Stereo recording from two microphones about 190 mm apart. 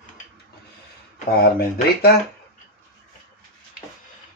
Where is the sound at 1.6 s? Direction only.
55° left (ahead or behind).